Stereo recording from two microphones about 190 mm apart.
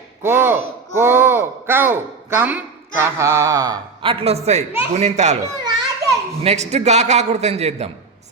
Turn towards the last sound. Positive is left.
turn(degrees=-35)  # may be behind; listen again after turning